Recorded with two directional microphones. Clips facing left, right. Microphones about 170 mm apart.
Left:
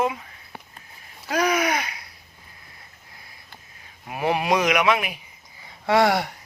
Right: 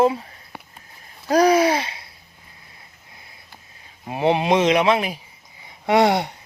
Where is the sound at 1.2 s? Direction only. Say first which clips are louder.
Right 7 dB; 35° right (ahead or behind).